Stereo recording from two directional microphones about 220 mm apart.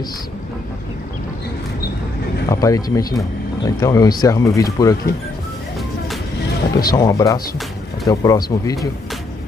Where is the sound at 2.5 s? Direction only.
15° left (ahead or behind).